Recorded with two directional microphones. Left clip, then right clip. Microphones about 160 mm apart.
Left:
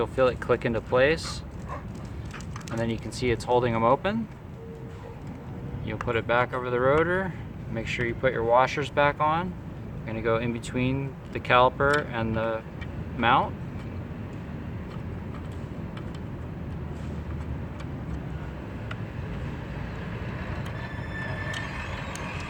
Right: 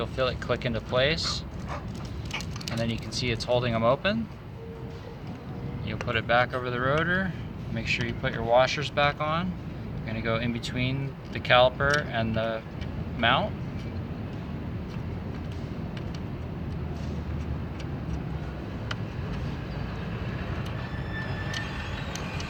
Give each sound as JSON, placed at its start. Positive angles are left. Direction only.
{"t": 0.0, "sound": "speech", "side_deg": 65}
{"t": 2.7, "sound": "speech", "side_deg": 65}
{"t": 5.9, "sound": "speech", "side_deg": 50}